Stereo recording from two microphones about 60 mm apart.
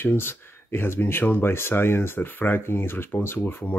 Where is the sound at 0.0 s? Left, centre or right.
Left.